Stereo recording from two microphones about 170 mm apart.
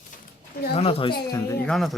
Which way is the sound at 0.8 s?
35° left (ahead or behind).